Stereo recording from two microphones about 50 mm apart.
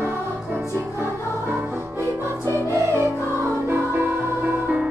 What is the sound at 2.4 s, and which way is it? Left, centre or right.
Music, right.